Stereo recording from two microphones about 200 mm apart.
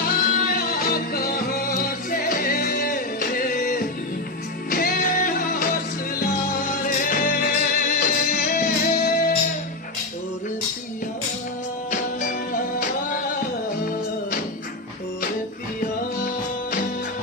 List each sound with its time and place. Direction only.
0.0 s music: 45° left (ahead or behind)
15.8 s music: 45° left (ahead or behind)